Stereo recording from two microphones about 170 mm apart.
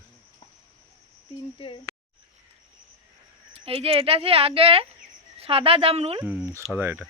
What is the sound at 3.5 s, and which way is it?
Speech, 35° right (ahead or behind).